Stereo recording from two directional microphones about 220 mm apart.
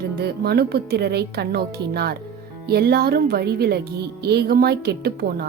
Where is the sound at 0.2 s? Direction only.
45° right (ahead or behind).